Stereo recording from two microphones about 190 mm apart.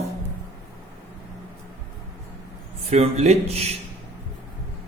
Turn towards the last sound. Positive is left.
turn(degrees=-30)  # may be behind; listen again after turning